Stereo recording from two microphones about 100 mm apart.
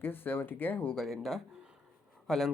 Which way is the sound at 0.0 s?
20° left (ahead or behind).